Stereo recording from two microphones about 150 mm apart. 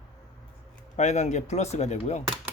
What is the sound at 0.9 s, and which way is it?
Speech, 50° left (ahead or behind).